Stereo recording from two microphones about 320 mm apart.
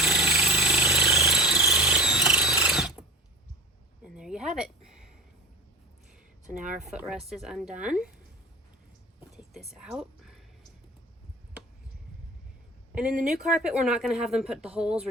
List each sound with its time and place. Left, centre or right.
0.0 s a sound: centre
4.0 s a sound: centre
6.8 s speech: centre
9.3 s speech: centre
13.0 s speech: right
13.4 s speech: centre